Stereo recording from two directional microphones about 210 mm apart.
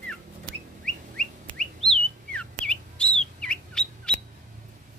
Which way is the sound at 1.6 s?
5° left (ahead or behind).